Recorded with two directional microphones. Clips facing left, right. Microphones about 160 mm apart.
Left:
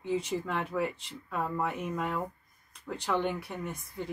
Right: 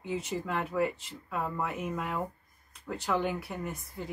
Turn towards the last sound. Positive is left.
turn(degrees=-5)  # may be behind; listen again after turning